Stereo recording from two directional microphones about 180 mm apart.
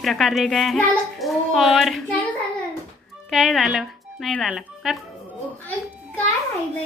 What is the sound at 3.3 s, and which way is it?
Speech, centre (ahead or behind).